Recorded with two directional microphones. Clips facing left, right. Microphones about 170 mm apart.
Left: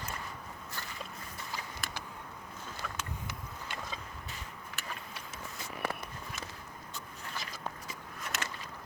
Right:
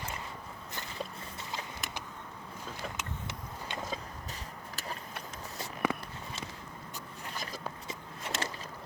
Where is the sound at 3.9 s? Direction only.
35° right (ahead or behind).